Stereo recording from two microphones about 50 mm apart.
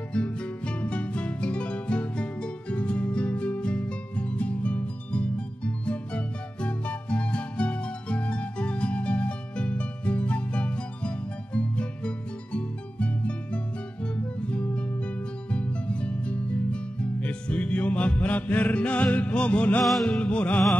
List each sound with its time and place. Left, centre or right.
0.1 s music: left
19.8 s music: centre
20.1 s music: left